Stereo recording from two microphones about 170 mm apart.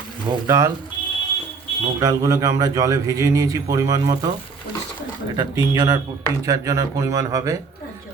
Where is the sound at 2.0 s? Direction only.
20° right (ahead or behind).